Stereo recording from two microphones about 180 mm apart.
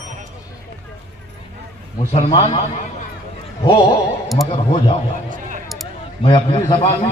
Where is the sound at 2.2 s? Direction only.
40° left (ahead or behind).